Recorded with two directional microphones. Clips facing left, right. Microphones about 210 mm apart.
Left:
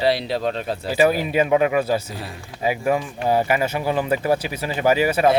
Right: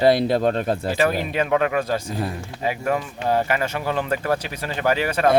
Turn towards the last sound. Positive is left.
turn(degrees=10)  # may be behind; listen again after turning